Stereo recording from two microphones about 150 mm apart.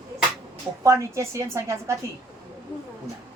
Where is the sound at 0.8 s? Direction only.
20° right (ahead or behind).